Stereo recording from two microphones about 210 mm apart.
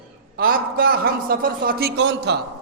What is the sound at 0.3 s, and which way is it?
A man's voice, 45° right (ahead or behind).